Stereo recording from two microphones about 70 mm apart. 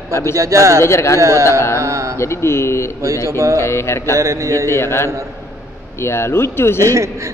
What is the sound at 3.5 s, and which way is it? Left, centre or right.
Speech, left.